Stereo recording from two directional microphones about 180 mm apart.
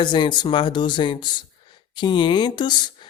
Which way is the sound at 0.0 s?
25° left (ahead or behind).